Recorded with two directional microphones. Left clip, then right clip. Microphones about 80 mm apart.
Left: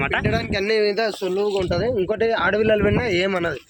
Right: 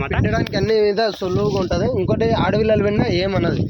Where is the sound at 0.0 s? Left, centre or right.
Centre.